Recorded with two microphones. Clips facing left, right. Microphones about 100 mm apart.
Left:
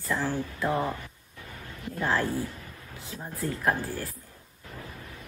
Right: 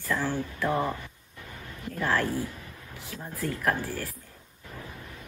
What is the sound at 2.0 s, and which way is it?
Speech, 20° left (ahead or behind).